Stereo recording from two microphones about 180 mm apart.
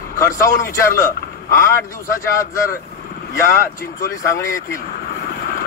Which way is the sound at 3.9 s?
15° left (ahead or behind).